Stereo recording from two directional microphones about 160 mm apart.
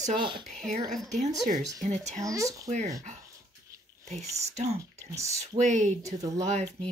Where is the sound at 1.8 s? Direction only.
45° right (ahead or behind).